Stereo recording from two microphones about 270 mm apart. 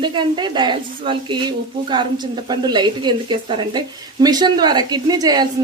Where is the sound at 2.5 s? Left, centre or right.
Centre.